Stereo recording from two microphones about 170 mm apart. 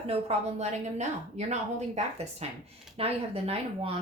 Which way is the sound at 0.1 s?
40° right (ahead or behind).